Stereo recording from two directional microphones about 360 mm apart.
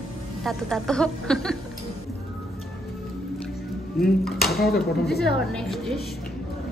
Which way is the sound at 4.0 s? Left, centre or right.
Centre.